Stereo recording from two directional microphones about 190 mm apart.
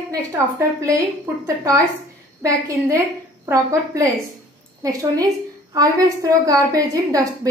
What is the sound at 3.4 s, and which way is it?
Speech, 15° right (ahead or behind).